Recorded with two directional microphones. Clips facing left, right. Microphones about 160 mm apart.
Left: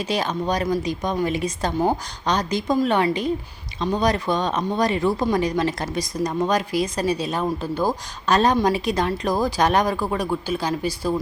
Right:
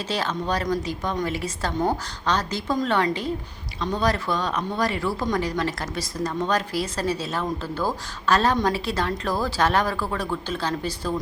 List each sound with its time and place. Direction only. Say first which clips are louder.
0.0 s speech: left 3 dB; 15° left (ahead or behind)